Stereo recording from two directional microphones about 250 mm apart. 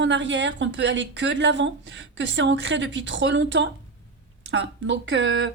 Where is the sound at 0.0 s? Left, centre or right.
Right.